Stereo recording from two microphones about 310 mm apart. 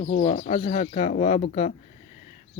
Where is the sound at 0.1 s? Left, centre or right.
Left.